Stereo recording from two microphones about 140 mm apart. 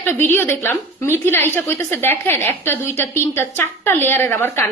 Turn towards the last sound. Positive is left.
turn(degrees=15)  # may be behind; listen again after turning